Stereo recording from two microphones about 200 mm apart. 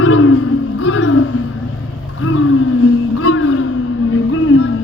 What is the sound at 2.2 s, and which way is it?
Wild animals, 90° left.